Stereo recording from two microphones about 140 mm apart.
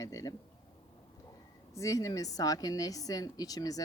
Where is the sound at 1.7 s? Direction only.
25° left (ahead or behind).